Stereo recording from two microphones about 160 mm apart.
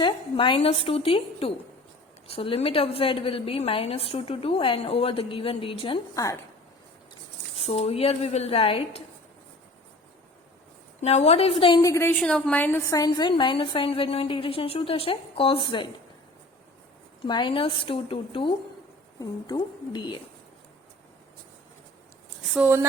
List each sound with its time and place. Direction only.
0.0 s a woman's voice: 30° left (ahead or behind)
6.1 s a woman's voice: 20° left (ahead or behind)
7.6 s a woman's voice: 40° left (ahead or behind)
11.0 s a woman's voice: 40° left (ahead or behind)
11.8 s a woman's voice: 20° left (ahead or behind)
17.2 s a woman's voice: 30° left (ahead or behind)
22.5 s speech: 15° right (ahead or behind)